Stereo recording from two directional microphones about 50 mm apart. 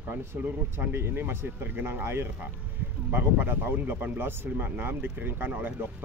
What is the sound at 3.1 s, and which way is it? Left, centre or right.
Speech, right.